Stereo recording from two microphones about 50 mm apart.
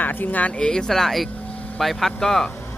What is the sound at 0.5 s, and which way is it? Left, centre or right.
Speech, centre.